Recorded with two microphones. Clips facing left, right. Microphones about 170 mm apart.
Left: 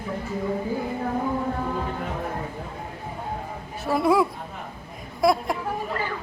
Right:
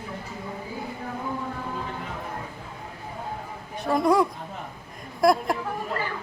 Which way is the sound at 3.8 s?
5° left (ahead or behind).